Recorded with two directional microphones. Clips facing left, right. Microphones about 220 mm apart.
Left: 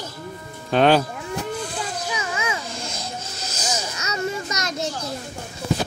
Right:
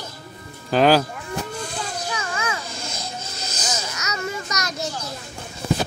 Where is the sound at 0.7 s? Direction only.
Centre (ahead or behind).